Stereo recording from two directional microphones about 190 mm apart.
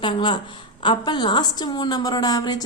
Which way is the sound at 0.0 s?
25° left (ahead or behind).